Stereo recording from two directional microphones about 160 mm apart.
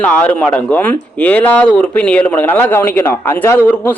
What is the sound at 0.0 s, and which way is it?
Speech, 10° left (ahead or behind).